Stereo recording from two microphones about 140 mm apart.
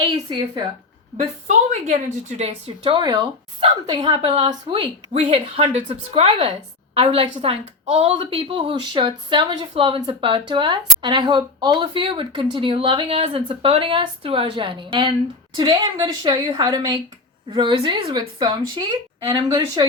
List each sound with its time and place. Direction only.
0.0 s speech: 35° right (ahead or behind)
1.2 s a woman's voice: 60° right (ahead or behind)
2.4 s speech: 40° right (ahead or behind)
3.0 s speech: 30° right (ahead or behind)
3.6 s speech: 40° right (ahead or behind)